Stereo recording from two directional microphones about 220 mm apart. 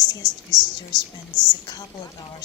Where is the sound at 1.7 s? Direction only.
20° left (ahead or behind).